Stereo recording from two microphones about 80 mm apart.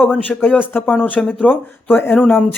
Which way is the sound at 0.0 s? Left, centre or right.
Left.